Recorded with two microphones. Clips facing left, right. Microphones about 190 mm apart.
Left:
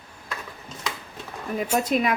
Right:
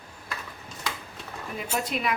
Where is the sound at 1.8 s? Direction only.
45° left (ahead or behind).